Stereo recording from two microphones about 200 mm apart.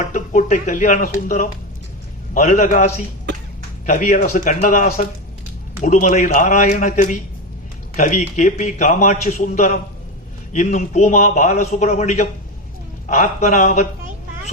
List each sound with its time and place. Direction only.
0.1 s a man's voice: 40° left (ahead or behind)